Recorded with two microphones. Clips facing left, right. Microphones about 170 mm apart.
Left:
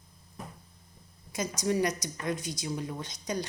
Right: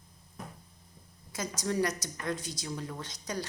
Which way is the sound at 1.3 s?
15° left (ahead or behind).